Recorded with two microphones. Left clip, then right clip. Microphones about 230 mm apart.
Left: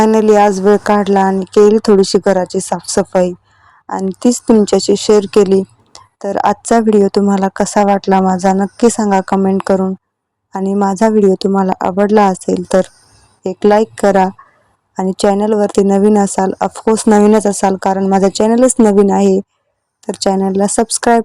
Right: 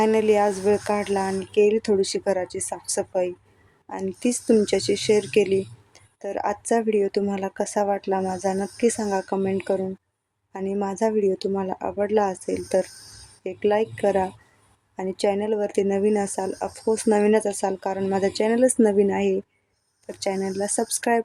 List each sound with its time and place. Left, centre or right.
0.0 s speech: left